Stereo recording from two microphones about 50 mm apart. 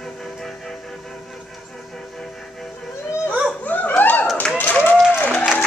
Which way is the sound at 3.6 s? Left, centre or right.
Left.